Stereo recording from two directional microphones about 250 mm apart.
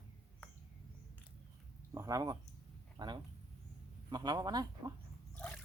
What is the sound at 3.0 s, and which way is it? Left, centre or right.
A man's voice, centre.